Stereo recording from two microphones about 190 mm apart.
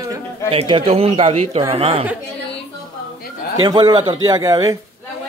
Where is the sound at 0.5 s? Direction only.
30° right (ahead or behind).